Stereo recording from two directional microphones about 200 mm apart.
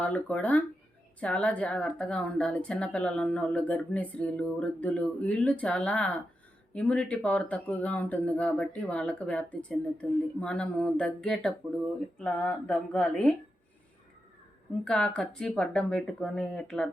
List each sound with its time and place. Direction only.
0.0 s a woman's voice: 5° left (ahead or behind)
14.8 s a woman's voice: 5° left (ahead or behind)